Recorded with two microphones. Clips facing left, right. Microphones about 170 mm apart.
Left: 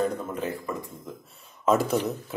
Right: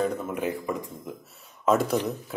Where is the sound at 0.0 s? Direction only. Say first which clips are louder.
Right 1 dB; 10° right (ahead or behind).